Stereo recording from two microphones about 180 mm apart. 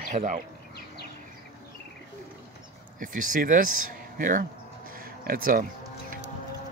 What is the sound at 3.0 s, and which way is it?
Speech, 50° right (ahead or behind).